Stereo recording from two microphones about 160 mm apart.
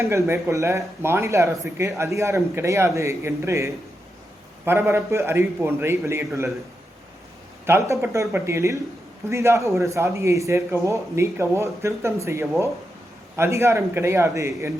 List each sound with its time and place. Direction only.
0.0 s a man's voice: 20° right (ahead or behind)
7.7 s a man's voice: 15° right (ahead or behind)